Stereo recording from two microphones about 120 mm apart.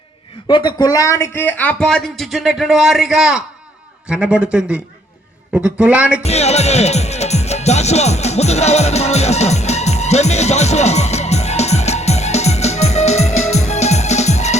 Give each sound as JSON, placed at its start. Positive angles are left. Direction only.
{"t": 0.4, "sound": "a man's voice", "side_deg": 40}
{"t": 5.8, "sound": "a man's voice", "side_deg": -10}
{"t": 6.2, "sound": "music", "side_deg": 65}